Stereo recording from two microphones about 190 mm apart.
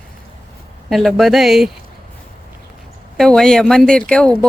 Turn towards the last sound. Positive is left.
turn(degrees=5)  # may be behind; listen again after turning